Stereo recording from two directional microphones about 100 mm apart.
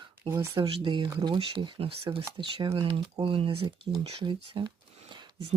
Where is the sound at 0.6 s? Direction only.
55° right (ahead or behind).